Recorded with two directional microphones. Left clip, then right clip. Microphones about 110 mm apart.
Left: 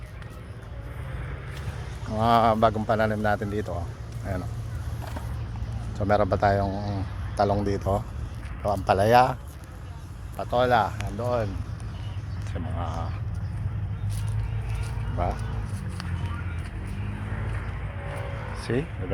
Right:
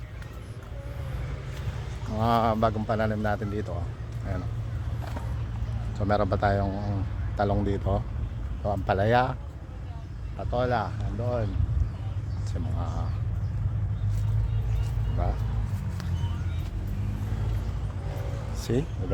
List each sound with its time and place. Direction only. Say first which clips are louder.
2.1 s speech: left 4 dB; 20° left (ahead or behind)
2.7 s speech: left 4 dB; 40° left (ahead or behind)
6.0 s speech: left 3 dB; 15° left (ahead or behind)
8.9 s speech: left 5 dB; 20° left (ahead or behind)
10.3 s speech: left 6 dB; 55° left (ahead or behind)
12.5 s speech: left 4 dB; 5° left (ahead or behind)
15.2 s speech: left 5 dB; 15° left (ahead or behind)
18.6 s speech: left 1 dB; 25° right (ahead or behind)